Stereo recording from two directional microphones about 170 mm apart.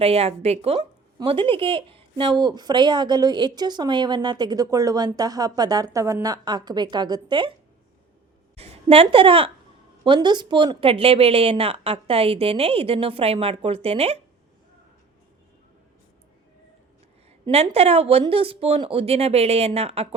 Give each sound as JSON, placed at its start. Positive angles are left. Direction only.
{"t": 0.0, "sound": "speech", "side_deg": -35}
{"t": 8.5, "sound": "speech", "side_deg": -35}
{"t": 17.4, "sound": "speech", "side_deg": -35}